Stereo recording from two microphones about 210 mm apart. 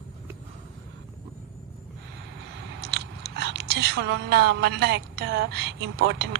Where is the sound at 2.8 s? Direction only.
50° right (ahead or behind).